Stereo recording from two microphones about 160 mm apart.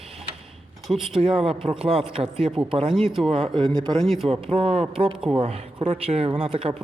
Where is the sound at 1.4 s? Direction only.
35° right (ahead or behind).